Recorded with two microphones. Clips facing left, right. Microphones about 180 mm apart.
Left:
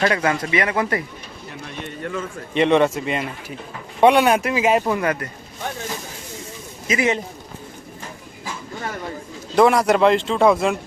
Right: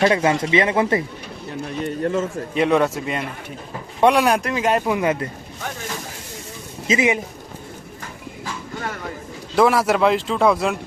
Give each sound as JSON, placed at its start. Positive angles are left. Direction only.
{"t": 0.1, "sound": "speech", "side_deg": -25}
{"t": 1.8, "sound": "a man's voice", "side_deg": -40}
{"t": 2.6, "sound": "speech", "side_deg": 0}
{"t": 4.9, "sound": "speech", "side_deg": -20}
{"t": 6.8, "sound": "speech", "side_deg": -25}
{"t": 9.6, "sound": "speech", "side_deg": 0}